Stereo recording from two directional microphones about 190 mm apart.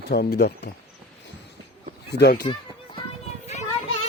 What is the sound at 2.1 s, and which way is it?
Speech, 55° left (ahead or behind).